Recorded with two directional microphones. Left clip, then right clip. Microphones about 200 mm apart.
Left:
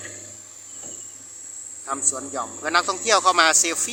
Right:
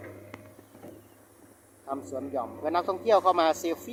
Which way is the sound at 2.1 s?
15° left (ahead or behind).